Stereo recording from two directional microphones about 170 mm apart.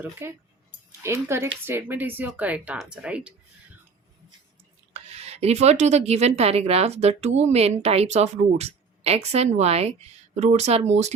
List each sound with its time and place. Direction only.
0.0 s speech: 15° right (ahead or behind)
4.9 s speech: 40° right (ahead or behind)